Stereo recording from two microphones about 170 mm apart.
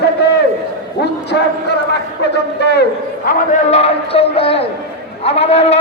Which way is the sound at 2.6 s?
75° left (ahead or behind).